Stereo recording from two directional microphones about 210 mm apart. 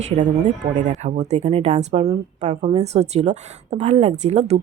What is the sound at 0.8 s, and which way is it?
Speech, 35° right (ahead or behind).